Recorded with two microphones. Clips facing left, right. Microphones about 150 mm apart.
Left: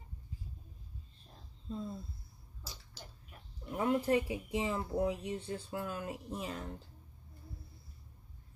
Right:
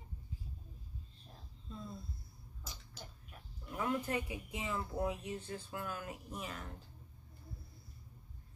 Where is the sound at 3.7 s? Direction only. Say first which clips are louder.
Left 6 dB; 30° left (ahead or behind).